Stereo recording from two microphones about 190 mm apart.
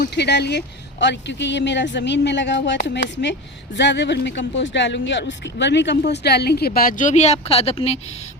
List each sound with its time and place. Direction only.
0.0 s speech: 60° left (ahead or behind); by 7.9 s 30° left (ahead or behind)